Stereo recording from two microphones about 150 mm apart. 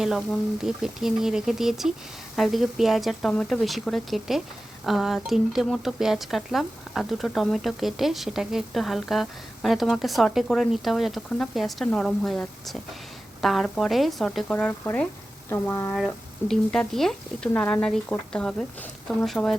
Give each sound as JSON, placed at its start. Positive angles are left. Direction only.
{"t": 0.0, "sound": "a woman's voice", "side_deg": -5}